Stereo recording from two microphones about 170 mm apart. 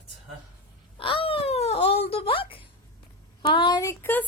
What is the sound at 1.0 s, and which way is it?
Wail, 30° left (ahead or behind).